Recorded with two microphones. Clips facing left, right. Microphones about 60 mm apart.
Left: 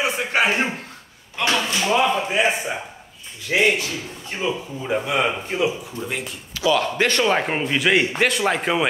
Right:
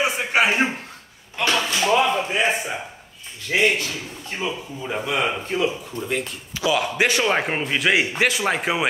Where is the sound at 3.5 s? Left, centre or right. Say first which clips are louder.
Left 1 dB; left.